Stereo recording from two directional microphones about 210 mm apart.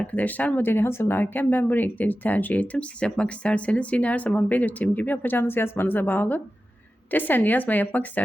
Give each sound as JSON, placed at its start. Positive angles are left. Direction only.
{"t": 0.0, "sound": "speech", "side_deg": 10}